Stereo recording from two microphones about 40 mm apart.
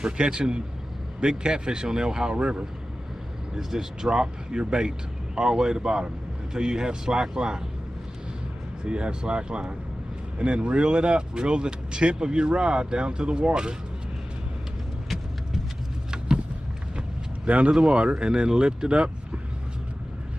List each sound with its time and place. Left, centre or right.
0.0 s speech: right
2.3 s speech: right
3.5 s speech: centre
8.8 s speech: right
17.5 s speech: right
17.7 s speech: right